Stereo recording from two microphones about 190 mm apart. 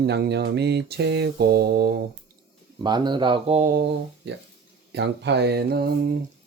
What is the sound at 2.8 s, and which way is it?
Speech, 25° right (ahead or behind).